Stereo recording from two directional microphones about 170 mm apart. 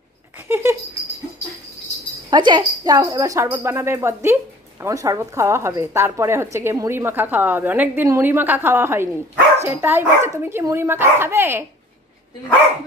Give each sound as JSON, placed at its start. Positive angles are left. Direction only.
{"t": 0.5, "sound": "speech", "side_deg": -15}
{"t": 2.2, "sound": "speech", "side_deg": -25}